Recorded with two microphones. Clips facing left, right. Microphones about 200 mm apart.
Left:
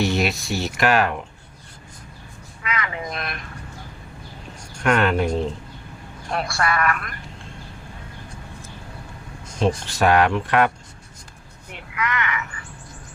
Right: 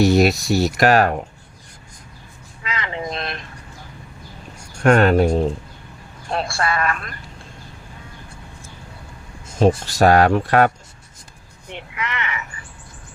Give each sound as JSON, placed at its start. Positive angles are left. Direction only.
{"t": 0.0, "sound": "speech", "side_deg": -40}
{"t": 2.6, "sound": "vehicle", "side_deg": -25}
{"t": 4.8, "sound": "speech", "side_deg": -40}
{"t": 6.3, "sound": "speech", "side_deg": -25}
{"t": 9.6, "sound": "speech", "side_deg": -40}
{"t": 11.7, "sound": "speech", "side_deg": -25}